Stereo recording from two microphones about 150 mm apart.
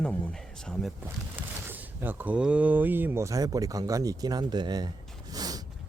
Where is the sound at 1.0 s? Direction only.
15° right (ahead or behind).